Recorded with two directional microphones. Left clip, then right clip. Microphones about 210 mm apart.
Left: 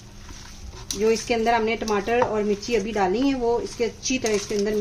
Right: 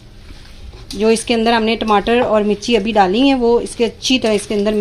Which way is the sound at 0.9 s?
35° right (ahead or behind).